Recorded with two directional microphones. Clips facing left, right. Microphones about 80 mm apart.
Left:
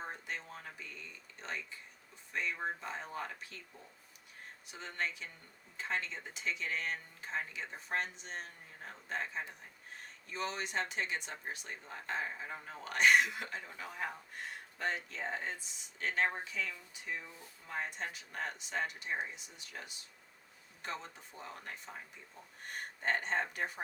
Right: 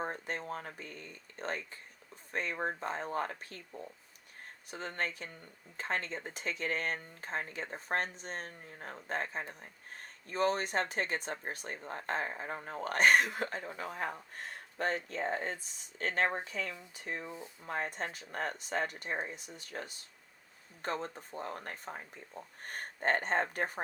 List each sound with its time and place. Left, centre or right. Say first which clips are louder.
0.0 s speech: right 5 dB; right
17.2 s speech: right 9 dB; right
17.7 s speech: right 3 dB; right